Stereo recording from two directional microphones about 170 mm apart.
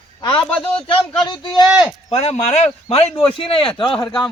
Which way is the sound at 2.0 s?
40° left (ahead or behind).